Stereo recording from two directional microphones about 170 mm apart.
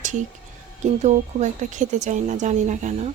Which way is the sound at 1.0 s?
45° right (ahead or behind).